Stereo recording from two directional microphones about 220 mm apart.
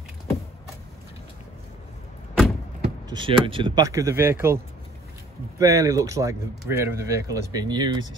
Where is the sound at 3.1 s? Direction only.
20° right (ahead or behind).